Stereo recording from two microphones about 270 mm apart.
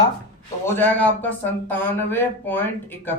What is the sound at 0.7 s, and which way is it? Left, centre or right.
A man's voice, centre.